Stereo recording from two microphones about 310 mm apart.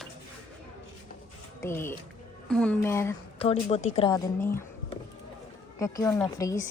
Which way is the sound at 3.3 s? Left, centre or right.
Centre.